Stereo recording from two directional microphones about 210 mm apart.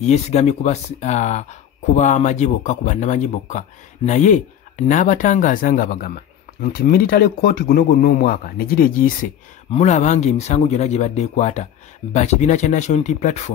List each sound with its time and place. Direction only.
0.0 s speech: 35° left (ahead or behind)